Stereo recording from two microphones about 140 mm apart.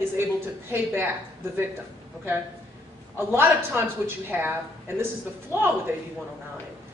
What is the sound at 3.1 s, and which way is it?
A woman's voice, 15° right (ahead or behind).